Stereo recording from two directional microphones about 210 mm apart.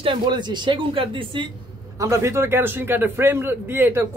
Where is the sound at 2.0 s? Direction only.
15° right (ahead or behind).